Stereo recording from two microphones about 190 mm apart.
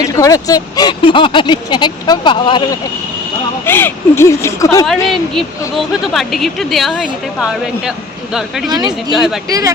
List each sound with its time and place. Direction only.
0.0 s speech: 20° left (ahead or behind)
3.7 s speech: 10° left (ahead or behind)
5.3 s speech: centre (ahead or behind)
8.7 s speech: 20° right (ahead or behind)
9.1 s speech: centre (ahead or behind)
9.5 s speech: 20° right (ahead or behind)